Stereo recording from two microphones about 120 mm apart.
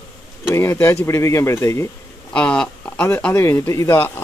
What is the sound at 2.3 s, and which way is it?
Speech, 10° left (ahead or behind).